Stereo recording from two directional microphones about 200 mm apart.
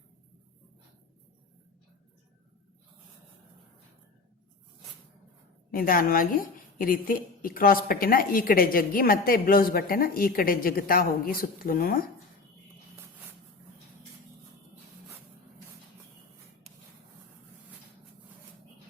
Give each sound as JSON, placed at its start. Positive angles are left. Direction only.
{"t": 5.7, "sound": "a woman's voice", "side_deg": 45}